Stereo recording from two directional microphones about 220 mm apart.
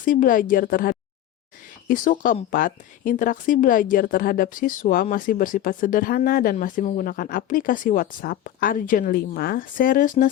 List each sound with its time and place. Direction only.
0.0 s speech: 40° left (ahead or behind)